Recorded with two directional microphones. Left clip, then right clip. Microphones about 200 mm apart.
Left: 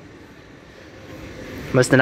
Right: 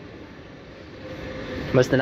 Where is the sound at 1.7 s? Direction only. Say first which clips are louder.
Left 3 dB; 20° left (ahead or behind).